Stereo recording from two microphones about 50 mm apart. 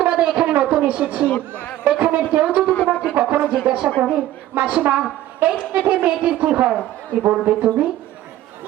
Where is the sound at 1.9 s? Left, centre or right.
Right.